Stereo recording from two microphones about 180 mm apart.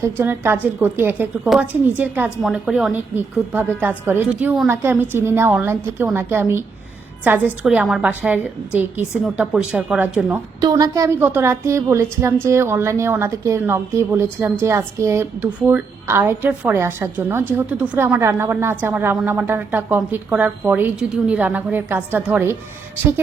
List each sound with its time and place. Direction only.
0.0 s a woman's voice: 10° right (ahead or behind)
10.6 s a woman's voice: 20° right (ahead or behind)